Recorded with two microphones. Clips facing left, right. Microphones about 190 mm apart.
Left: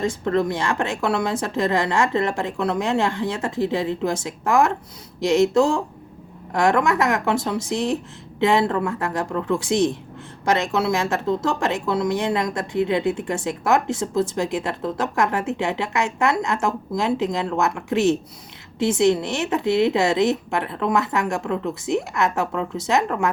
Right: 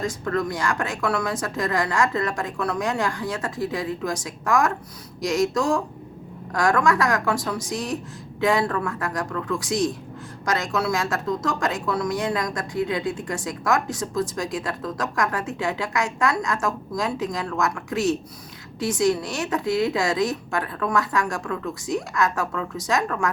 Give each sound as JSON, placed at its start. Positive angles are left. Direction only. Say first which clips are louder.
{"t": 0.0, "sound": "a woman's voice", "louder": "left 4 dB", "side_deg": 25}